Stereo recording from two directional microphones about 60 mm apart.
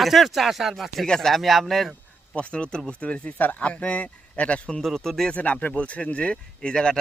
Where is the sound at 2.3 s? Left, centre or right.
Centre.